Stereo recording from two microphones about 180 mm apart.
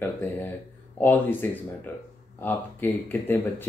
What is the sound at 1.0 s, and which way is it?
Speech, 10° left (ahead or behind).